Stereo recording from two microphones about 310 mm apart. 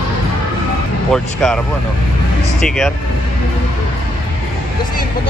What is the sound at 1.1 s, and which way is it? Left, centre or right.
Speech, centre.